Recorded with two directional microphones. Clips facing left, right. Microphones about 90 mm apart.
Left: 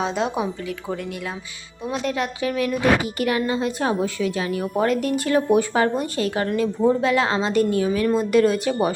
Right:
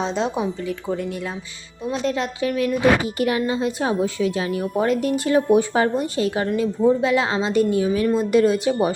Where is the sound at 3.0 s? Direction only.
25° right (ahead or behind).